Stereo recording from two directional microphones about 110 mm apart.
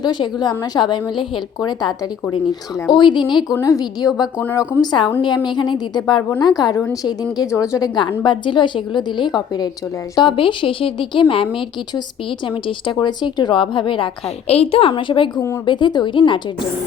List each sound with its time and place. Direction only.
0.0 s a woman's voice: 45° left (ahead or behind)
2.9 s a woman's voice: 45° left (ahead or behind)
3.6 s a woman's voice: 35° left (ahead or behind)
6.7 s a woman's voice: 30° left (ahead or behind)
7.9 s a woman's voice: 45° left (ahead or behind)
12.6 s a woman's voice: 45° left (ahead or behind)
14.4 s a woman's voice: 70° left (ahead or behind); by 16.4 s 45° left (ahead or behind)